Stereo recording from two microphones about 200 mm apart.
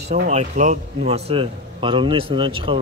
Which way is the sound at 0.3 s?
35° right (ahead or behind).